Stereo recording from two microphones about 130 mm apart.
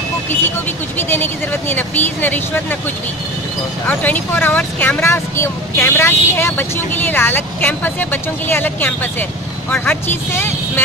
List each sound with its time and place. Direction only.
0.9 s speech: 15° left (ahead or behind)
3.8 s speech: 15° left (ahead or behind)